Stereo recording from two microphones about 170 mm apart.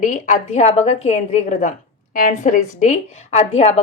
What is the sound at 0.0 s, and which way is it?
Speech, 50° left (ahead or behind).